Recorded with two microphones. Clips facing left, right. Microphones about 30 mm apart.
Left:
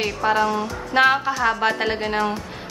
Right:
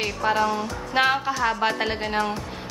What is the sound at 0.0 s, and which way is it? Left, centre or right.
A woman's voice, centre.